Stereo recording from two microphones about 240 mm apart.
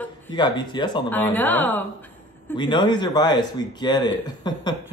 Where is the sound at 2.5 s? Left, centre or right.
Centre.